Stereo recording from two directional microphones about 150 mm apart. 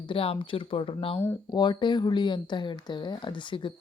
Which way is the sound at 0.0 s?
35° left (ahead or behind).